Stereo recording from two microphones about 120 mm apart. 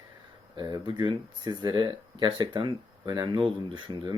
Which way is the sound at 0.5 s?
40° right (ahead or behind).